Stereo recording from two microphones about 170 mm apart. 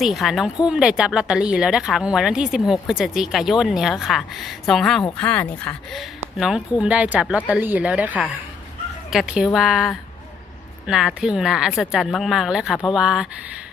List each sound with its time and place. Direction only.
0.0 s speech: centre (ahead or behind)